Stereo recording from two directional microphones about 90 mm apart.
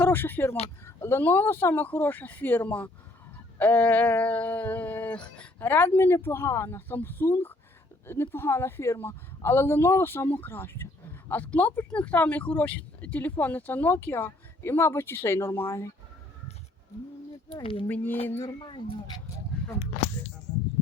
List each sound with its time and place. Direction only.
0.0 s speech: 25° left (ahead or behind)
3.6 s a sound: 20° left (ahead or behind)
5.5 s speech: 25° left (ahead or behind)
17.5 s speech: 90° left
17.8 s speech: 20° left (ahead or behind)
18.6 s speech: 65° left (ahead or behind)